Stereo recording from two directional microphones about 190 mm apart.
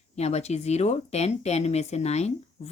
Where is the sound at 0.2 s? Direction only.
35° left (ahead or behind).